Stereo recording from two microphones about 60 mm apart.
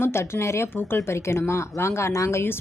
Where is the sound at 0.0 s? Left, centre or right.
Left.